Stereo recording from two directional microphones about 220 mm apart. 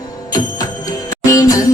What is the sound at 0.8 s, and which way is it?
Music, 15° left (ahead or behind).